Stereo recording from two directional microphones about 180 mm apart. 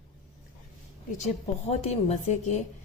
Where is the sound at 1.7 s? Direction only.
40° left (ahead or behind).